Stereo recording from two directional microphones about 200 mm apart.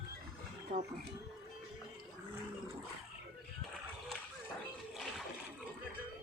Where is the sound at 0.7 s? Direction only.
45° right (ahead or behind).